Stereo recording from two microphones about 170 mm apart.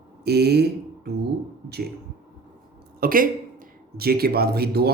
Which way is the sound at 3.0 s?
55° right (ahead or behind).